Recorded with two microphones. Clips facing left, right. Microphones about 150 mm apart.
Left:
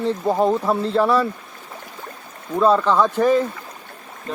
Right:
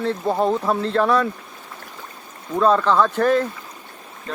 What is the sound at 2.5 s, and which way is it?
Speech, 10° left (ahead or behind).